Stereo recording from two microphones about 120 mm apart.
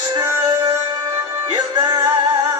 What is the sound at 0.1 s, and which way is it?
Music, 35° right (ahead or behind).